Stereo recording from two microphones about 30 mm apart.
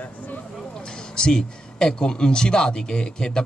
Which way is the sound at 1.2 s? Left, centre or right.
Left.